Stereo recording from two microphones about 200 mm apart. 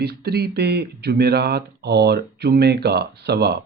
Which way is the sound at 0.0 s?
50° right (ahead or behind).